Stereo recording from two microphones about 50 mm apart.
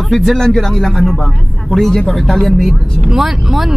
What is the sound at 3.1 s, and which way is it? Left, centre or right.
Speech, centre.